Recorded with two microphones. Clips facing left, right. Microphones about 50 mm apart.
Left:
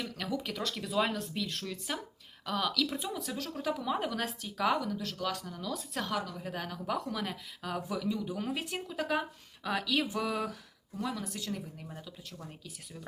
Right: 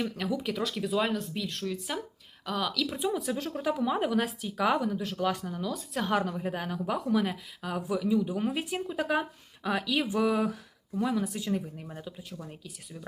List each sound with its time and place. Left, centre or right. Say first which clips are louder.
0.2 s speech: right 5 dB; centre
3.3 s speech: right 4 dB; right
5.7 s speech: right 4 dB; centre
6.1 s a woman's voice: right 8 dB; right
6.3 s speech: right 6 dB; centre